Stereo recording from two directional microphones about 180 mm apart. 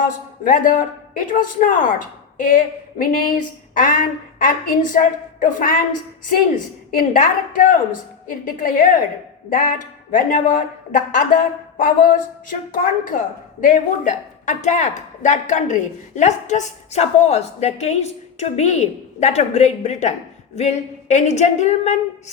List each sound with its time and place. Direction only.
0.0 s speech: 50° left (ahead or behind)
6.9 s a woman's voice: 50° left (ahead or behind)